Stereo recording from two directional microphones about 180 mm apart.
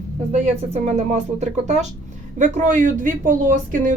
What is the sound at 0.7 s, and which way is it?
Speech, 40° right (ahead or behind).